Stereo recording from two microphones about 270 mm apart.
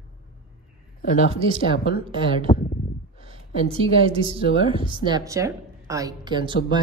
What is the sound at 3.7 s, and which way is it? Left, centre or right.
A woman's voice, right.